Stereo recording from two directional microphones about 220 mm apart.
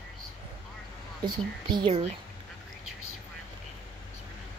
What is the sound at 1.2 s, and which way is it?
Speech, 20° right (ahead or behind).